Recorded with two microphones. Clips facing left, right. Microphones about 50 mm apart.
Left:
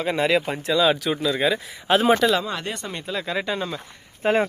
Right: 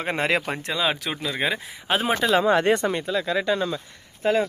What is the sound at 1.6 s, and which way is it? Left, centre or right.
Speech, centre.